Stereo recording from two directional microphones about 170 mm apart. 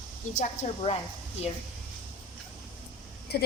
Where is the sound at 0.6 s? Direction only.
45° left (ahead or behind).